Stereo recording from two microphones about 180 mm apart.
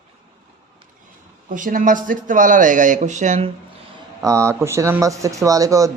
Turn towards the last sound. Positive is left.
turn(degrees=-20)  # may be behind; listen again after turning